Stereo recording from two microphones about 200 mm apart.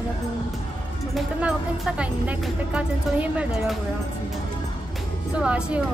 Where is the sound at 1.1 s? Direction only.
5° right (ahead or behind).